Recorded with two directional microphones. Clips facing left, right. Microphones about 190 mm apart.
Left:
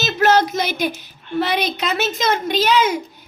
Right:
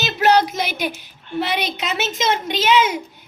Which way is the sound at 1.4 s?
15° right (ahead or behind).